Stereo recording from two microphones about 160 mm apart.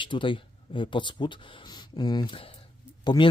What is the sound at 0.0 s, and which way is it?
Speech, 30° left (ahead or behind).